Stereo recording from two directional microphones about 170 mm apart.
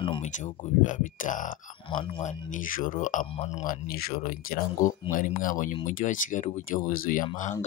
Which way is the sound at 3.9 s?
60° left (ahead or behind).